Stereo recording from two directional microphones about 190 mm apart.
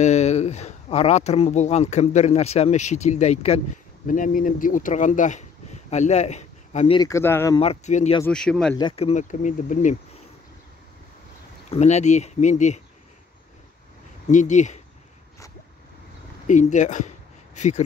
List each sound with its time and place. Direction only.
0.0 s speech: 35° left (ahead or behind)
4.1 s speech: 45° left (ahead or behind)
7.0 s speech: 15° left (ahead or behind)
7.5 s speech: 30° left (ahead or behind)
8.3 s speech: 5° left (ahead or behind)
8.7 s speech: 30° left (ahead or behind)
11.7 s speech: 35° left (ahead or behind)
14.3 s speech: 40° left (ahead or behind)
16.4 s speech: 40° left (ahead or behind)